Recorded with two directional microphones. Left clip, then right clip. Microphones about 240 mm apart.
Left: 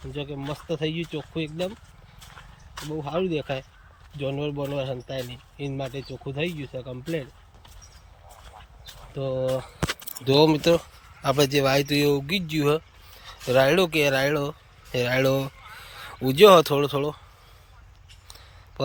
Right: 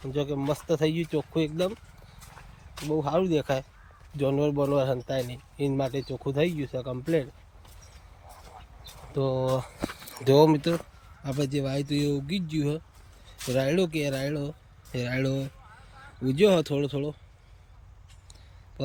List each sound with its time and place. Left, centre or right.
0.1 s speech: centre
2.9 s speech: centre
9.1 s speech: right
11.3 s speech: centre